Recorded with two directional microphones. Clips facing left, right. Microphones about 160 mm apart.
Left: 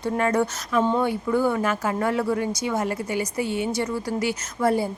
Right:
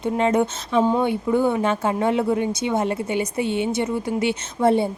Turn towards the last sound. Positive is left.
turn(degrees=-25)  # may be behind; listen again after turning